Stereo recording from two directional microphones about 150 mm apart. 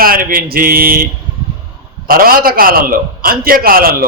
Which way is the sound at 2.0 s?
75° right (ahead or behind).